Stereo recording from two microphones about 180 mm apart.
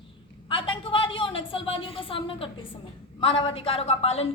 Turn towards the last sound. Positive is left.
turn(degrees=35)  # may be behind; listen again after turning